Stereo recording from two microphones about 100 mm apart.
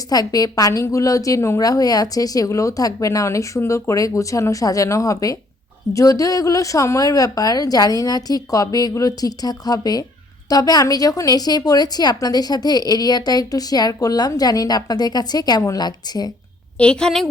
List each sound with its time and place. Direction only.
0.1 s a woman's voice: 40° left (ahead or behind)
16.7 s a woman's voice: 10° left (ahead or behind)